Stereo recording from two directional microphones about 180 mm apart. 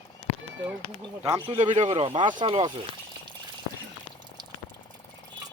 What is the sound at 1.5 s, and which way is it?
A man's voice, 40° right (ahead or behind).